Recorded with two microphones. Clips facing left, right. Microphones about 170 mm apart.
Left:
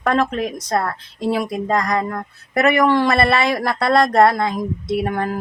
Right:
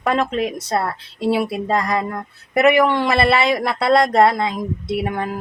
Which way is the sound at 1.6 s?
25° right (ahead or behind).